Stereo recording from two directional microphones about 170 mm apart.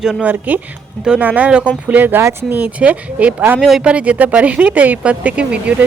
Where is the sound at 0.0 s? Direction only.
5° right (ahead or behind).